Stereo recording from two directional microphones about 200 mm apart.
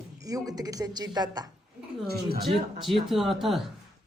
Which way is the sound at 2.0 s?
50° right (ahead or behind).